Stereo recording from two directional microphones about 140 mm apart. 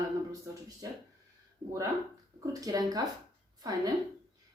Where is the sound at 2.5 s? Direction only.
25° right (ahead or behind).